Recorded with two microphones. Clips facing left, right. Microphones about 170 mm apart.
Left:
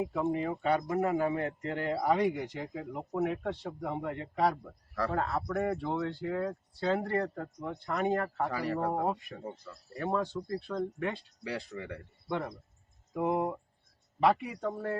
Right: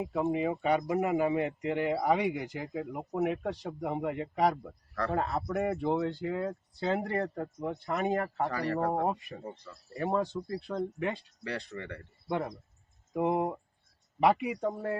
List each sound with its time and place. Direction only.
0.3 s speech: 10° right (ahead or behind)
8.4 s speech: 5° left (ahead or behind)
9.0 s speech: 15° right (ahead or behind)
9.4 s speech: centre (ahead or behind)
10.0 s speech: 15° right (ahead or behind)
11.4 s speech: 5° left (ahead or behind)
13.1 s speech: 20° right (ahead or behind)